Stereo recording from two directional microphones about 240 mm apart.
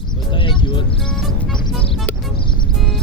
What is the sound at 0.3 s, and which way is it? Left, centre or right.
Vehicle, left.